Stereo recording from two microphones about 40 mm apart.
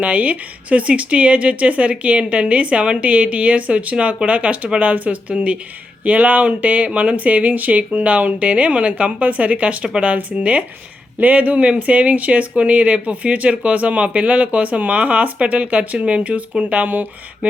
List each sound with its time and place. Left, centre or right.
0.0 s speech: right